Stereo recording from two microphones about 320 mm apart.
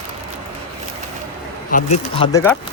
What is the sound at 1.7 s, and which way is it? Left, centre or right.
Speech, left.